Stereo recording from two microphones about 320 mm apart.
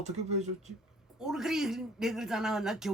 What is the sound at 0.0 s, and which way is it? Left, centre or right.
Speech, right.